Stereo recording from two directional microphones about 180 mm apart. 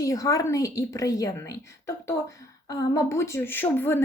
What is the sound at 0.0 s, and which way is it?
A woman's voice, 20° left (ahead or behind).